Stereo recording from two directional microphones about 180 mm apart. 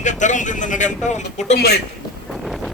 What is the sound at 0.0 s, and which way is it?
A man's voice, 40° left (ahead or behind).